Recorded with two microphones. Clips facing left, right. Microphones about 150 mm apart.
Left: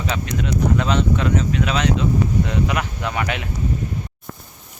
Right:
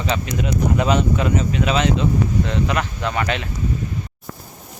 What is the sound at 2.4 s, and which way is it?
Speech, 10° left (ahead or behind).